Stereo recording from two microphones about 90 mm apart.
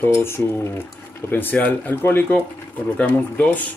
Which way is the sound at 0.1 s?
30° left (ahead or behind).